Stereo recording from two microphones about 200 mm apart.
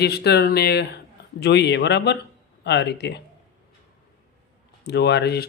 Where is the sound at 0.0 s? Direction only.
55° left (ahead or behind).